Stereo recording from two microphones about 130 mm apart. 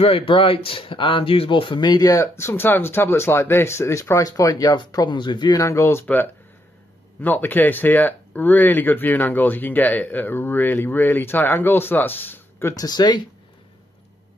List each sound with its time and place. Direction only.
0.0 s speech: 45° left (ahead or behind); by 12.7 s 15° left (ahead or behind)
12.7 s speech: 30° left (ahead or behind)